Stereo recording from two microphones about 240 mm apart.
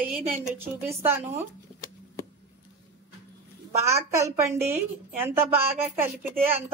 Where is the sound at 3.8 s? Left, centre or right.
Centre.